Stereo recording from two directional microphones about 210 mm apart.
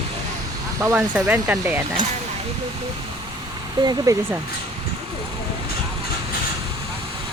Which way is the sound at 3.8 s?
20° right (ahead or behind).